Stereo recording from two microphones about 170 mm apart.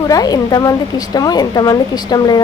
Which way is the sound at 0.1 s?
20° left (ahead or behind).